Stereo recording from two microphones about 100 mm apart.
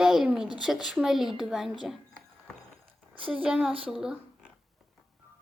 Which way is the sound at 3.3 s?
10° right (ahead or behind).